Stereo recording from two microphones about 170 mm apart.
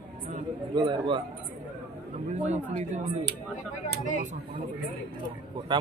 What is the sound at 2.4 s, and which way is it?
Speech, 40° right (ahead or behind).